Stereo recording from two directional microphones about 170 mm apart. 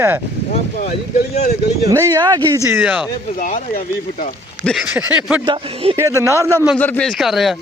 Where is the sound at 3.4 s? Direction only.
55° left (ahead or behind).